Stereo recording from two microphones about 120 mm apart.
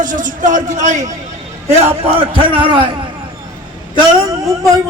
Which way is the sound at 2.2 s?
45° right (ahead or behind).